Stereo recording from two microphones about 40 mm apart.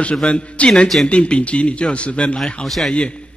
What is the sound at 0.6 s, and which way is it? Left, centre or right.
A man's voice, left.